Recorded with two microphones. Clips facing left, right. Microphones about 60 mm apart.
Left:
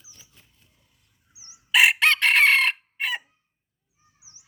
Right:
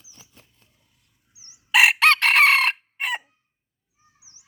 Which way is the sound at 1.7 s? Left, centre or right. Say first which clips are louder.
Right 2 dB; right.